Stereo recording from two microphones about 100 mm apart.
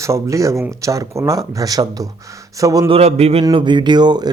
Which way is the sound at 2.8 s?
80° right.